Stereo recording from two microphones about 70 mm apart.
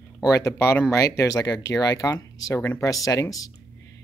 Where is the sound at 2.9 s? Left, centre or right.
Left.